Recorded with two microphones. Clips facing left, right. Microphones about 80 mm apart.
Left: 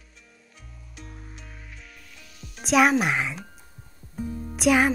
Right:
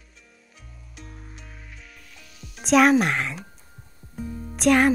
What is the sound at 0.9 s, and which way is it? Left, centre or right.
Music, centre.